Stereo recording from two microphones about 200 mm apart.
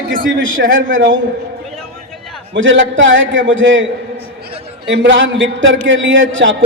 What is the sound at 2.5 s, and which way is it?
A man's voice, 70° right (ahead or behind).